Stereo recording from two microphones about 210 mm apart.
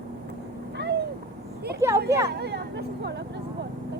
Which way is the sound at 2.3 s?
50° right (ahead or behind).